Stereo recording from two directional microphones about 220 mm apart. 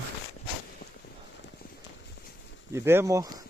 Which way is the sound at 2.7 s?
10° right (ahead or behind).